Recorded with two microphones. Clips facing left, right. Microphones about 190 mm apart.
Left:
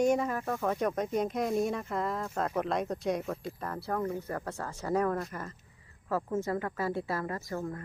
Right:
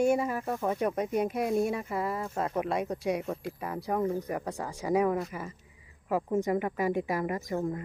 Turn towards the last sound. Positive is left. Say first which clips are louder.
# right 4 dB
turn(degrees=-20)  # may be behind; listen again after turning